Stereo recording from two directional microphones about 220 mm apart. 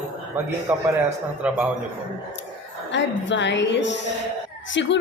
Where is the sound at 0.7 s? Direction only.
10° right (ahead or behind).